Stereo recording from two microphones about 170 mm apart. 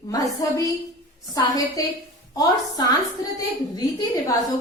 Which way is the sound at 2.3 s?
20° left (ahead or behind).